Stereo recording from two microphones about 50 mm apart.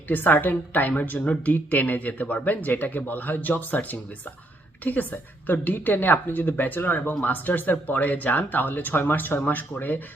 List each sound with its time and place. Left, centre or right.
0.1 s speech: left
1.2 s speech: left
1.5 s speech: left